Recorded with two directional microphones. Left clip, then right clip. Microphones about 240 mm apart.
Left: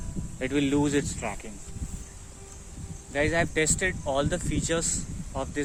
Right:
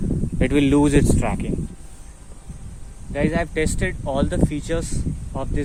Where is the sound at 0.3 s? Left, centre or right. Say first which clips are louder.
Right 8 dB; right.